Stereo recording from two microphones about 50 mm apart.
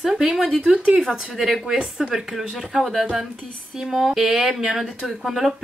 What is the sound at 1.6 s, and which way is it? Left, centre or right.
Speech, centre.